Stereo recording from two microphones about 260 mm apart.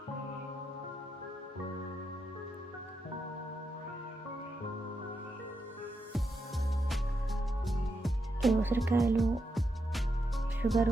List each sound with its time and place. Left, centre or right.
7.7 s music: centre
10.6 s speech: centre